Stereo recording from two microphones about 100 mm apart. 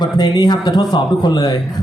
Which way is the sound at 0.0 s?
45° left (ahead or behind).